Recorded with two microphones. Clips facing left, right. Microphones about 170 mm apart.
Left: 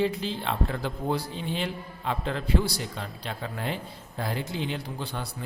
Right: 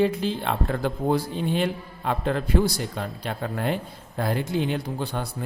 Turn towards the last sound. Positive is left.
turn(degrees=-50)  # may be behind; listen again after turning